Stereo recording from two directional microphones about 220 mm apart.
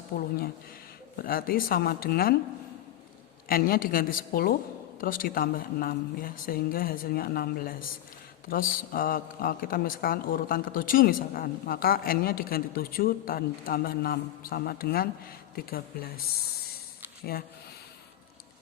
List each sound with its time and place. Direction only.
0.1 s speech: 40° left (ahead or behind)
3.5 s speech: 40° left (ahead or behind)